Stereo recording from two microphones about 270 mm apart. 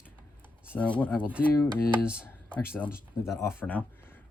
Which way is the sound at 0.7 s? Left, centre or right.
Centre.